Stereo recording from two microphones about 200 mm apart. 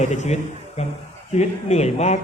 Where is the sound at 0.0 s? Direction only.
35° left (ahead or behind).